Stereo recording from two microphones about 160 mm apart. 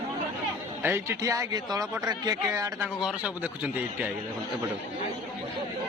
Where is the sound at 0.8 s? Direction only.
15° right (ahead or behind).